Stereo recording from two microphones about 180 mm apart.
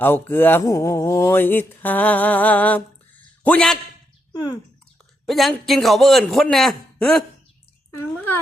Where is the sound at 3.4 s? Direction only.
5° left (ahead or behind).